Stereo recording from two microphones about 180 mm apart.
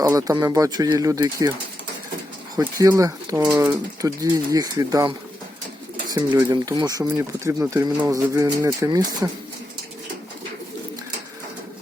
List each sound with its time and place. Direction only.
0.0 s speech: 20° right (ahead or behind)
2.6 s speech: 20° right (ahead or behind)
6.5 s speech: 20° right (ahead or behind)